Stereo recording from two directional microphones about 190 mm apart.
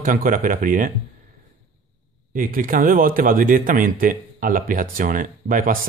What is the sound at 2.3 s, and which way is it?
Speech, 45° right (ahead or behind).